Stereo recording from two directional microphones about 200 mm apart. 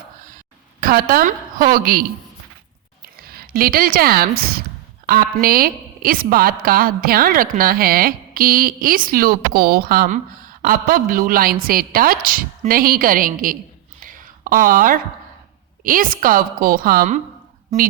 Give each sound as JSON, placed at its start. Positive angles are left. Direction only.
{"t": 0.8, "sound": "a woman's voice", "side_deg": -45}
{"t": 3.2, "sound": "a woman's voice", "side_deg": -50}
{"t": 14.0, "sound": "a sound", "side_deg": -45}
{"t": 15.8, "sound": "a woman's voice", "side_deg": -45}